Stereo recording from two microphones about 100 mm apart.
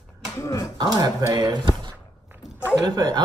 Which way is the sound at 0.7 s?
40° right (ahead or behind).